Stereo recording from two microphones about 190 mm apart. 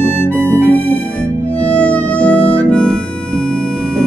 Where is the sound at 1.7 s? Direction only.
5° left (ahead or behind).